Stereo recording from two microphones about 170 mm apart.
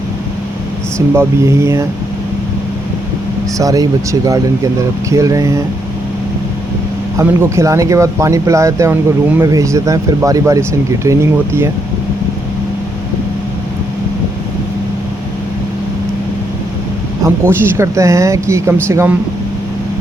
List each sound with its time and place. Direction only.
1.1 s speech: 15° right (ahead or behind)
3.6 s speech: 20° right (ahead or behind)
7.2 s speech: 15° right (ahead or behind)
17.2 s speech: 15° right (ahead or behind)